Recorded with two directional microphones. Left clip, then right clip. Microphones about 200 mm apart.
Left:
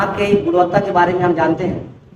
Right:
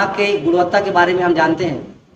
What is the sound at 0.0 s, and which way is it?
A man's voice, 30° right (ahead or behind).